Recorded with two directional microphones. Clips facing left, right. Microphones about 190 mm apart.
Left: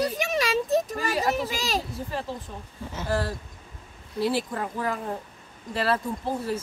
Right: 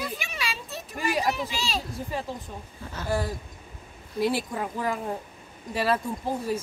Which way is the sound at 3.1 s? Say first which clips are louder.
Even; 15° right (ahead or behind).